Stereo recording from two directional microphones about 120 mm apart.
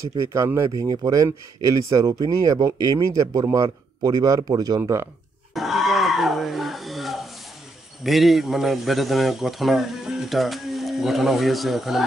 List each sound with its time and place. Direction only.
0.1 s speech: 30° right (ahead or behind)
4.7 s speech: 20° right (ahead or behind)
5.5 s a sound: centre (ahead or behind)
8.0 s a man's voice: centre (ahead or behind)